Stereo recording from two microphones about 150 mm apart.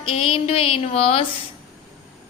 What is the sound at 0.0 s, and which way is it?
A woman's voice, 40° left (ahead or behind).